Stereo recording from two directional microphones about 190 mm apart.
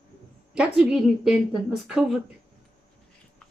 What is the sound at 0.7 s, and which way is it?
A woman's voice, 5° right (ahead or behind).